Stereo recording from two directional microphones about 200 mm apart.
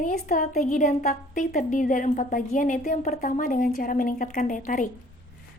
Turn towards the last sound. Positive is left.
turn(degrees=40)  # may be behind; listen again after turning